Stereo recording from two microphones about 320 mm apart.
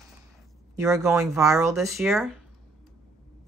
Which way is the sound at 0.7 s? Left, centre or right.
Centre.